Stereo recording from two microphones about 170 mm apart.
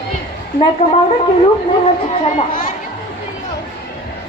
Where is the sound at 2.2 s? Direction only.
50° left (ahead or behind).